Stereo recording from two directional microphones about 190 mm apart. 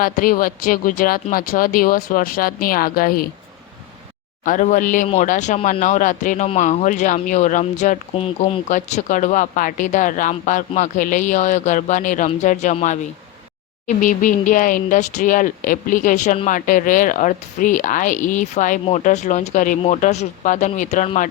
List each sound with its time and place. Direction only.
0.0 s speech: 50° left (ahead or behind)
4.4 s speech: 45° left (ahead or behind)
8.7 s speech: 40° left (ahead or behind)